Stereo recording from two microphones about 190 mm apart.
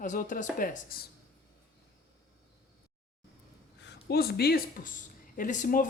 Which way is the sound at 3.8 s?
60° left (ahead or behind).